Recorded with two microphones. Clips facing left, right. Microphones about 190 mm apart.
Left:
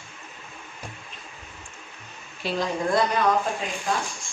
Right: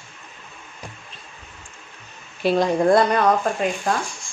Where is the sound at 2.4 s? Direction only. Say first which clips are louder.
Right 9 dB; 60° right (ahead or behind).